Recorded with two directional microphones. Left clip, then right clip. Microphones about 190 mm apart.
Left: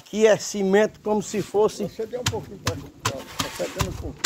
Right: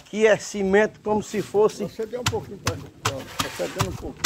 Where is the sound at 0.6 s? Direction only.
25° left (ahead or behind).